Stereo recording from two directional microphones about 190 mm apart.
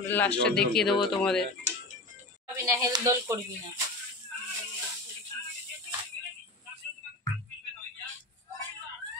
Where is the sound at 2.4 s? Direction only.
15° right (ahead or behind).